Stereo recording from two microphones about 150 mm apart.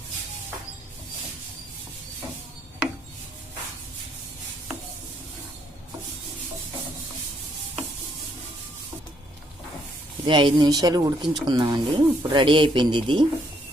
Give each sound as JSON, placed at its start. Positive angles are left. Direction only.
{"t": 10.2, "sound": "speech", "side_deg": -30}